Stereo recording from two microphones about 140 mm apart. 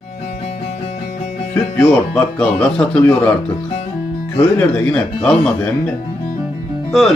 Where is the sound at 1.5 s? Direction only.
20° left (ahead or behind).